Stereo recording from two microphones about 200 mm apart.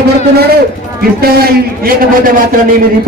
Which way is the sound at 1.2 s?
50° right (ahead or behind).